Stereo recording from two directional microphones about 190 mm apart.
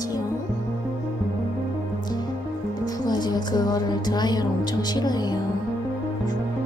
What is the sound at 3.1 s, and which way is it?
Music, 20° left (ahead or behind).